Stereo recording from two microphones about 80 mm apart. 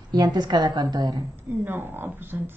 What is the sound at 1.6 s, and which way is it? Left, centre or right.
Speech, right.